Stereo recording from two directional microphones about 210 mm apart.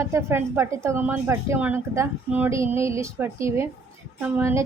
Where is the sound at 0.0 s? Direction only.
15° right (ahead or behind).